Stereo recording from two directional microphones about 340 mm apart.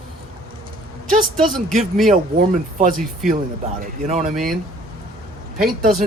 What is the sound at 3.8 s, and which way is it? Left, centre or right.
Speech, right.